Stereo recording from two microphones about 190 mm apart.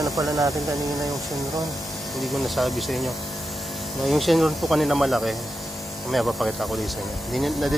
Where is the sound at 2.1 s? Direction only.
Centre (ahead or behind).